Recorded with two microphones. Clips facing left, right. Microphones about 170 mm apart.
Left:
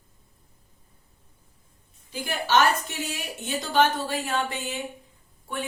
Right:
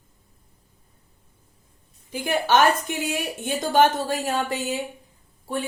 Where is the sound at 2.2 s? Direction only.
50° right (ahead or behind).